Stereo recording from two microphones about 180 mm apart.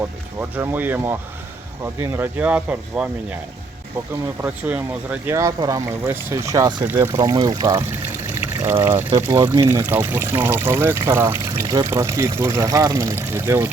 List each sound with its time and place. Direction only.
0.0 s speech: 15° right (ahead or behind)
4.4 s speech: 10° right (ahead or behind)
9.0 s speech: 25° right (ahead or behind)